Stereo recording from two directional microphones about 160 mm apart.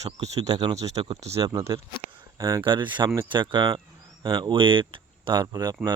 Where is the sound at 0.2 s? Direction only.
25° right (ahead or behind).